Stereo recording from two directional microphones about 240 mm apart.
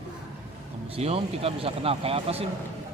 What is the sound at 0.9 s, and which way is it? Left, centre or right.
Speech, right.